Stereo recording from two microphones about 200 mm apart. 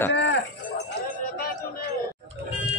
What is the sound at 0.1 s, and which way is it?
Cowbell, 65° left (ahead or behind).